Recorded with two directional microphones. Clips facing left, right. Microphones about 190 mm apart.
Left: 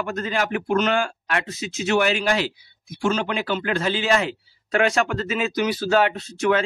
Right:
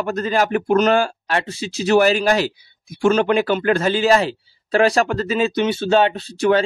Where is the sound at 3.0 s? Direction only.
55° right (ahead or behind).